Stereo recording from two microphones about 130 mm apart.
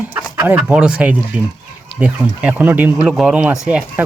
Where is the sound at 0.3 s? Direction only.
15° right (ahead or behind).